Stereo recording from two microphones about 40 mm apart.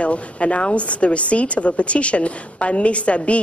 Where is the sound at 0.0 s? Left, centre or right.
Left.